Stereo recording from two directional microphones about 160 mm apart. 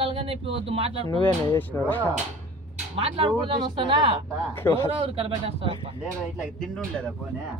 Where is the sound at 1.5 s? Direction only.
10° left (ahead or behind).